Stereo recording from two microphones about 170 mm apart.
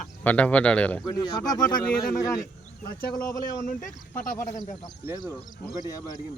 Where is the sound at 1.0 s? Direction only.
25° left (ahead or behind).